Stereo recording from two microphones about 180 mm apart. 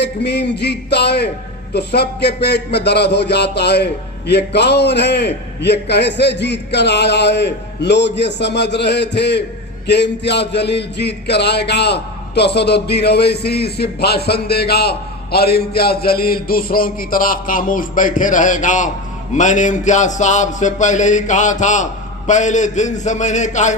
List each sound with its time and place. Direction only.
0.0 s a man's voice: 70° left (ahead or behind); by 18.9 s 45° left (ahead or behind)
19.3 s a sound: 45° left (ahead or behind)
22.3 s a man's voice: 40° left (ahead or behind)